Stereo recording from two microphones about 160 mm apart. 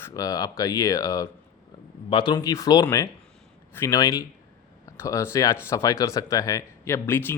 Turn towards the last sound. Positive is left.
turn(degrees=15)  # may be behind; listen again after turning